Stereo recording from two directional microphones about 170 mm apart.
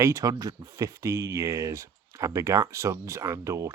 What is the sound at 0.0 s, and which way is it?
Speech, 20° right (ahead or behind).